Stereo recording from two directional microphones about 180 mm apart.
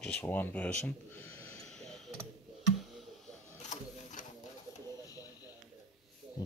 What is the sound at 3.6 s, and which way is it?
Sewing machine, 45° left (ahead or behind).